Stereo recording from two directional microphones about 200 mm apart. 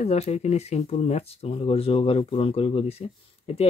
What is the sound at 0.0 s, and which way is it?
Speech, 30° left (ahead or behind).